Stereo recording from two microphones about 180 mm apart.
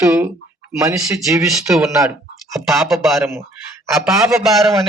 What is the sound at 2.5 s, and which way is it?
Speech, centre (ahead or behind).